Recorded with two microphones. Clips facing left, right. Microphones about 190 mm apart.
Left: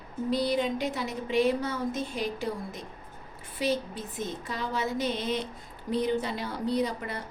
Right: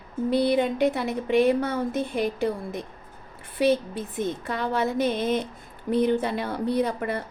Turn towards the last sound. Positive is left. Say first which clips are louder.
# right 4 dB
turn(degrees=-55)  # may be behind; listen again after turning